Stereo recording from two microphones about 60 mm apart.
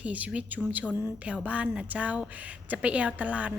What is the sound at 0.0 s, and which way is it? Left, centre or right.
A woman's voice, right.